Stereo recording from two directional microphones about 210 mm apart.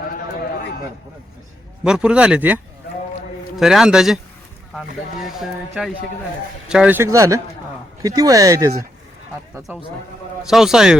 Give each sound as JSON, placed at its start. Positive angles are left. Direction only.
{"t": 1.8, "sound": "speech", "side_deg": -5}
{"t": 5.2, "sound": "speech", "side_deg": 0}
{"t": 10.5, "sound": "speech", "side_deg": 0}